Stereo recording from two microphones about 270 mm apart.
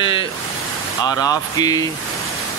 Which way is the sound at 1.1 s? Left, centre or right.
Centre.